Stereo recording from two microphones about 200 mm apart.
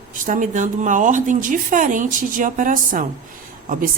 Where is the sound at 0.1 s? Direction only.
40° right (ahead or behind).